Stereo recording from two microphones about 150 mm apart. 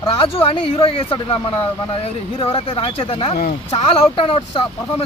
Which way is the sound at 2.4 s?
35° left (ahead or behind).